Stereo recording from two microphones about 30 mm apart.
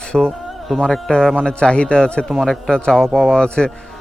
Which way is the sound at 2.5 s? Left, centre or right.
Left.